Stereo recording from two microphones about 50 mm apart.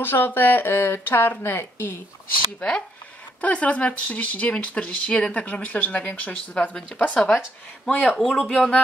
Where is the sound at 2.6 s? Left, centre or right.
Left.